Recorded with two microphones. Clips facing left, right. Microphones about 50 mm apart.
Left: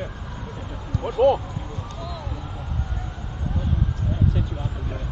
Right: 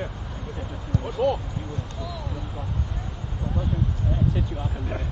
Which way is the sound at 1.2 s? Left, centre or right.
Centre.